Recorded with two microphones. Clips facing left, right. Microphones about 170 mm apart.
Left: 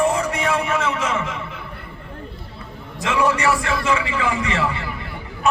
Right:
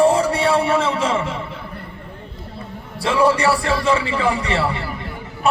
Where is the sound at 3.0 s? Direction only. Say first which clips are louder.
Right 3 dB; 35° right (ahead or behind).